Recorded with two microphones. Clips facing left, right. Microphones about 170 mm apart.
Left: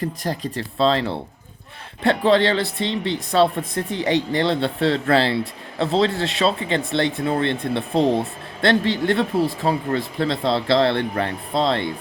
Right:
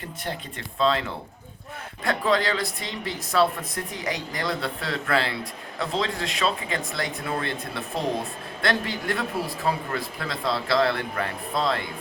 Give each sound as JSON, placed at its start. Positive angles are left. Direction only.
{"t": 0.2, "sound": "speech", "side_deg": 35}